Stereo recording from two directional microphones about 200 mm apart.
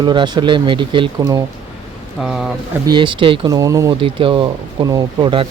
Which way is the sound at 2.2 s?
Centre (ahead or behind).